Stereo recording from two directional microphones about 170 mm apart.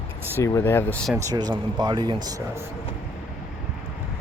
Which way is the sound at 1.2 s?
25° right (ahead or behind).